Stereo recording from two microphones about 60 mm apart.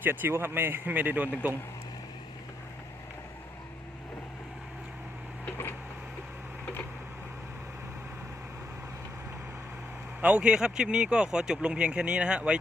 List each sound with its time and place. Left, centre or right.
0.0 s speech: right
10.2 s speech: centre